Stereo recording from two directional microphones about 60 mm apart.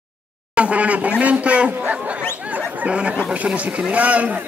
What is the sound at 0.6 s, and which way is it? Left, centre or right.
Speech, right.